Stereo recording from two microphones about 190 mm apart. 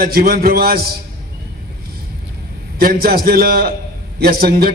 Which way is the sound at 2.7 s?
50° right (ahead or behind).